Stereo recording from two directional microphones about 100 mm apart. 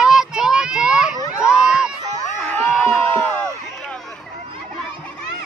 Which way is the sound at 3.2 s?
15° left (ahead or behind).